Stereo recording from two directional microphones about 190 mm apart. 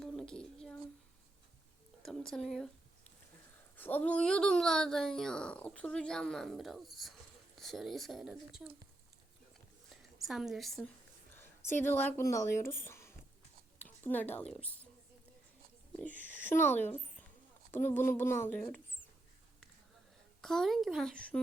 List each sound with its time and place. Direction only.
0.0 s child singing: 5° left (ahead or behind)
2.0 s speech: centre (ahead or behind)
3.8 s speech: 10° left (ahead or behind)
9.9 s a sound: centre (ahead or behind)
11.3 s speech: 10° left (ahead or behind)
16.4 s speech: 10° left (ahead or behind)
20.4 s speech: centre (ahead or behind)